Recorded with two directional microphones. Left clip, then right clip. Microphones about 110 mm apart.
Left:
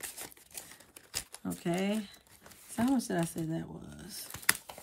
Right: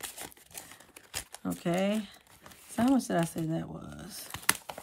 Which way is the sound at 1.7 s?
25° right (ahead or behind).